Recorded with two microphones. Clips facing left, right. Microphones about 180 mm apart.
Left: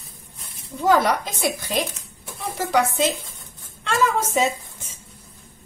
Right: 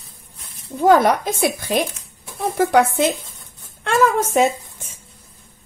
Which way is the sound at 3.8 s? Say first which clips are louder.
Right 4 dB; 55° right (ahead or behind).